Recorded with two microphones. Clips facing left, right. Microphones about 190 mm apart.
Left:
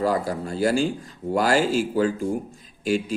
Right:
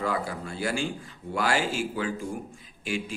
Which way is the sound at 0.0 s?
40° left (ahead or behind).